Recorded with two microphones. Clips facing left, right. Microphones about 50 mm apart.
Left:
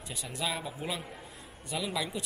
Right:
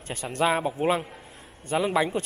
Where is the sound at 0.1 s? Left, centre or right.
Right.